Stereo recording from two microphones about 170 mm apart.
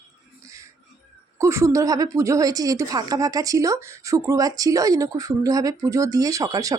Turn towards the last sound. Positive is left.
turn(degrees=-20)  # may be behind; listen again after turning